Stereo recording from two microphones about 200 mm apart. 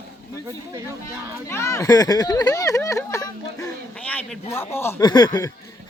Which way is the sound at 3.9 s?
5° left (ahead or behind).